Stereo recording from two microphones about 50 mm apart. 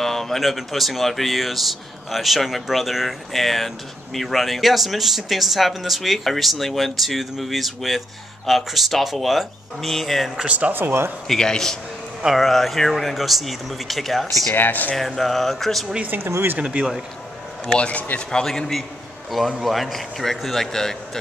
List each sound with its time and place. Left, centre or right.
0.0 s speech: centre
10.3 s speech: right
10.7 s speech: right
11.2 s a man's voice: centre
14.5 s speech: left
15.0 s speech: centre
16.3 s speech: right
16.5 s speech: right
17.6 s speech: left
18.3 s a man's voice: centre